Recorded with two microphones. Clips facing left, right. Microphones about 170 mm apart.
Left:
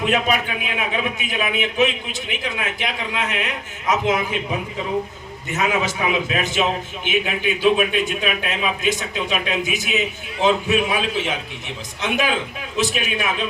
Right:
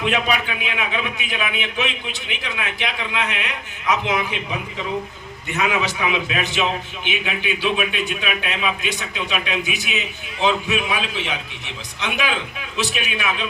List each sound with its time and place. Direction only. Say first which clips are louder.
0.0 s a man's voice: left 1 dB; 45° left (ahead or behind)
5.5 s a man's voice: left 1 dB; 45° left (ahead or behind)